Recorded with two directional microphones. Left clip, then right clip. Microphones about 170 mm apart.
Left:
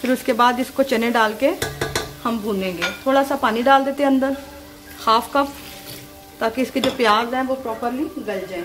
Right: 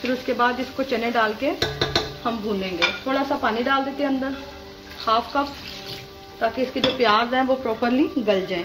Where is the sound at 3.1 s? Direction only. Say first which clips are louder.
Left 5 dB; 60° left (ahead or behind).